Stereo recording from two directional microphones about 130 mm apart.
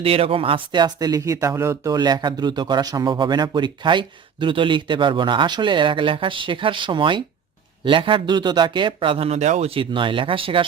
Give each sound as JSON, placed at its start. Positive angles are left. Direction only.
{"t": 0.0, "sound": "speech", "side_deg": -45}